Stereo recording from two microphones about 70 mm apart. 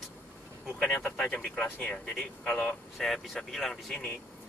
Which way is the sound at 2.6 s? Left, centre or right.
Centre.